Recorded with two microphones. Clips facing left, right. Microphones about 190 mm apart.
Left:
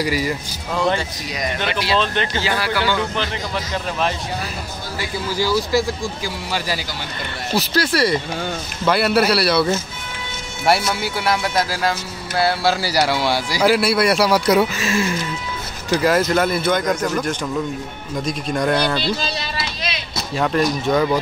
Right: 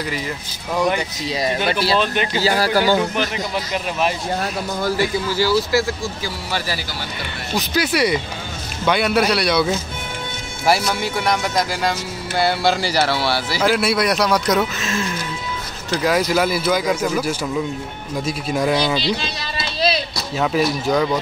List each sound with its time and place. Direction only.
0.0 s speech: 10° left (ahead or behind)
0.7 s speech: 15° right (ahead or behind)
2.4 s speech: 40° right (ahead or behind)
3.2 s speech: 15° right (ahead or behind)
5.4 s speech: 15° left (ahead or behind)
7.5 s speech: centre (ahead or behind)
20.3 s speech: 5° right (ahead or behind)